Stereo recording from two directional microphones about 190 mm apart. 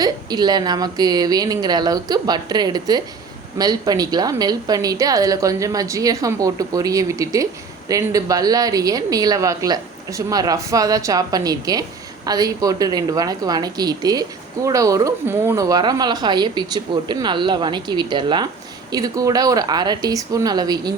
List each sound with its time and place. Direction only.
0.0 s a woman's voice: 20° right (ahead or behind)